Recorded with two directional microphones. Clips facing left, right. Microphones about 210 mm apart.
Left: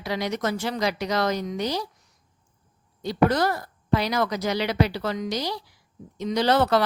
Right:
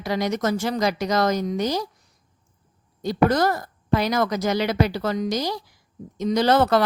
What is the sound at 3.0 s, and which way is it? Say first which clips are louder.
A woman's voice: right 2 dB; 45° right (ahead or behind).